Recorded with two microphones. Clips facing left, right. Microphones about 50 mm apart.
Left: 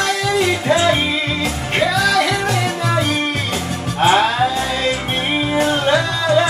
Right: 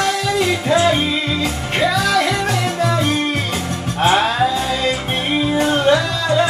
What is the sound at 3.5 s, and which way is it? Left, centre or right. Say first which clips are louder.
Music: even; centre.